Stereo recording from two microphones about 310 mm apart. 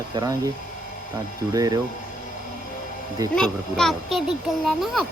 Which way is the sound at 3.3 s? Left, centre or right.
Centre.